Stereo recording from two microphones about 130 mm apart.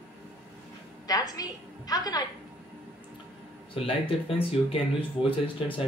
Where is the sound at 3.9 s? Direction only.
45° left (ahead or behind).